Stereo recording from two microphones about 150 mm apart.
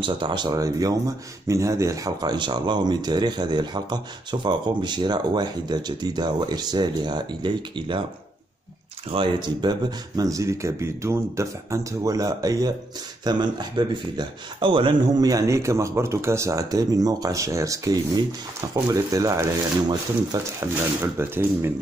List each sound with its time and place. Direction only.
0.0 s speech: 30° right (ahead or behind)
9.1 s speech: 30° right (ahead or behind); by 21.6 s 15° right (ahead or behind)